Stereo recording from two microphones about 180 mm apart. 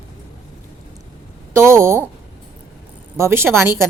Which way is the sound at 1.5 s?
15° right (ahead or behind).